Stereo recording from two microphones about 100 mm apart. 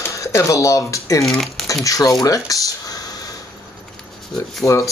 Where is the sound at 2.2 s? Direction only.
35° left (ahead or behind).